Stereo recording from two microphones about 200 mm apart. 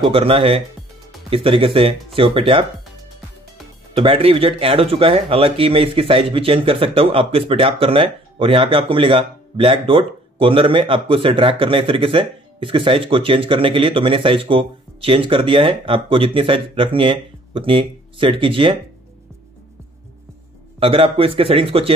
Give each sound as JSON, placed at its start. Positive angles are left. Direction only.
{"t": 0.0, "sound": "speech", "side_deg": -25}
{"t": 3.9, "sound": "speech", "side_deg": -25}
{"t": 20.8, "sound": "speech", "side_deg": -30}